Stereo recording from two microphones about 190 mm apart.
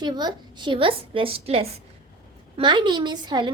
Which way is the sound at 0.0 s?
20° right (ahead or behind).